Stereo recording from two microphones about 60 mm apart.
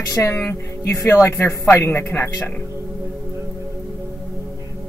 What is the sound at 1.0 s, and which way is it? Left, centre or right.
Speech, left.